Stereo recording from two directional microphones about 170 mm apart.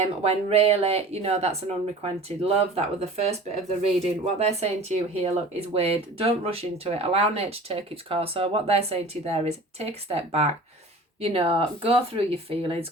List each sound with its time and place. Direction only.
0.0 s speech: 40° right (ahead or behind)